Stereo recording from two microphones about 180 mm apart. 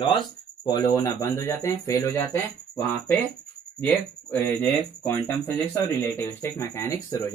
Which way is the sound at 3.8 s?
10° left (ahead or behind).